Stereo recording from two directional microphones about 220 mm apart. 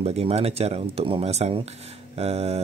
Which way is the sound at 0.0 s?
25° right (ahead or behind).